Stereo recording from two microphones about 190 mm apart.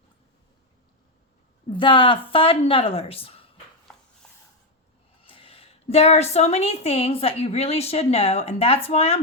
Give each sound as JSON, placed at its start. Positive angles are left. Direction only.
{"t": 1.7, "sound": "a woman's voice", "side_deg": 25}
{"t": 5.2, "sound": "a woman's voice", "side_deg": 30}